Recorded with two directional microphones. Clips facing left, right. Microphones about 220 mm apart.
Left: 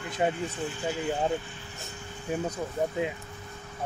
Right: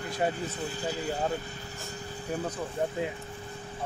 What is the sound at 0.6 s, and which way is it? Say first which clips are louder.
Speech: left 1 dB; 35° right (ahead or behind).